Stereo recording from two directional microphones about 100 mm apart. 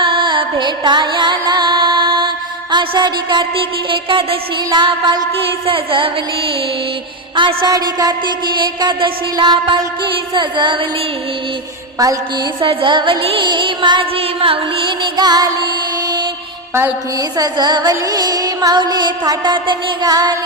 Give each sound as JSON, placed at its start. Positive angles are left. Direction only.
{"t": 0.0, "sound": "music", "side_deg": -55}
{"t": 3.8, "sound": "music", "side_deg": -60}
{"t": 7.3, "sound": "music", "side_deg": -55}
{"t": 7.7, "sound": "music", "side_deg": -40}
{"t": 12.5, "sound": "music", "side_deg": -55}
{"t": 14.2, "sound": "music", "side_deg": -65}
{"t": 17.2, "sound": "music", "side_deg": -40}